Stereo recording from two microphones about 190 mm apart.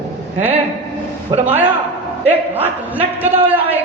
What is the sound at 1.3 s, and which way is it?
Speech, 30° right (ahead or behind).